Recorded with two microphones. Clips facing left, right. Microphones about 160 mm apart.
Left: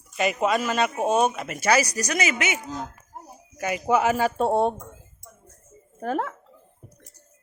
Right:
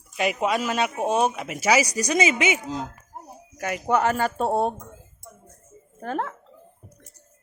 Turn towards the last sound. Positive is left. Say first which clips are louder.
# left 2 dB
turn(degrees=5)  # may be behind; listen again after turning